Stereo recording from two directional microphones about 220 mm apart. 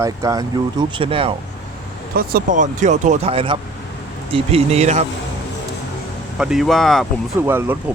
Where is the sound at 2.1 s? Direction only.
40° right (ahead or behind).